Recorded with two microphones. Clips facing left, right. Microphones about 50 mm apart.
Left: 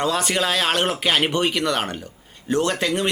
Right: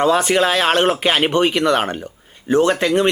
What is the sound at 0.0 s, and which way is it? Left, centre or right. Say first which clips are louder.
Speech: right 7 dB; centre.